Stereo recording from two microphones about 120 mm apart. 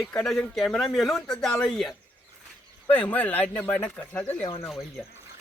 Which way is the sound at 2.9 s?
15° left (ahead or behind).